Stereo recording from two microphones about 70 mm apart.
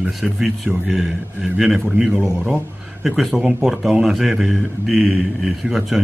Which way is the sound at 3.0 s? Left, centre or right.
Centre.